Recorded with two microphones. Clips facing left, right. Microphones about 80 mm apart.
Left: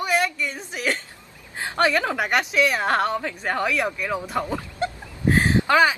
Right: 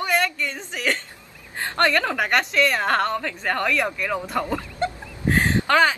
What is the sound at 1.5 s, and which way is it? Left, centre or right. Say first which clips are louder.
A woman's voice: even; centre.